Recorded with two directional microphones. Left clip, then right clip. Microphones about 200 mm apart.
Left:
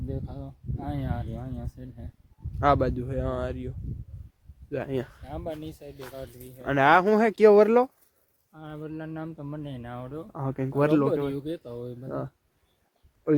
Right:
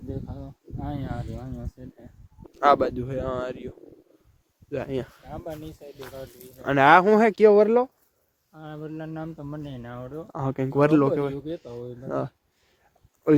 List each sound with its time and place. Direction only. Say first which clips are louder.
0.1 s speech: right 3 dB; 15° left (ahead or behind); by 1.7 s 30° left (ahead or behind)
2.6 s speech: right 4 dB; 10° right (ahead or behind)
4.7 s speech: right 1 dB; 10° left (ahead or behind)
5.2 s speech: left 1 dB; 60° left (ahead or behind)
6.6 s speech: right 4 dB; 10° right (ahead or behind)
7.4 s speech: left 1 dB; 10° left (ahead or behind)
10.3 s speech: right 4 dB; 15° right (ahead or behind)
11.3 s speech: even; 60° left (ahead or behind)
12.0 s speech: right 7 dB; 30° right (ahead or behind)